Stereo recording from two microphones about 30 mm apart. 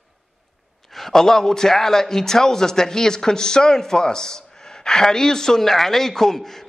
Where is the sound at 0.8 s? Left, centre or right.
Centre.